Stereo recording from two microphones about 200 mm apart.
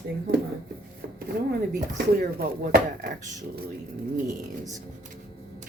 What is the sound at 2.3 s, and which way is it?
Speech, 50° right (ahead or behind).